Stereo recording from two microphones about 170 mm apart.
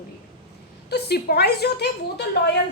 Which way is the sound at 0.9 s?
70° left (ahead or behind).